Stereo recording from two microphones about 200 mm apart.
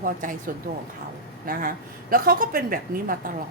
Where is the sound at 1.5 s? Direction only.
45° right (ahead or behind).